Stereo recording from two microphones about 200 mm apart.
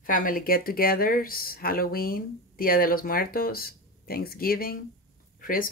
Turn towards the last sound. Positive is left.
turn(degrees=45)  # may be behind; listen again after turning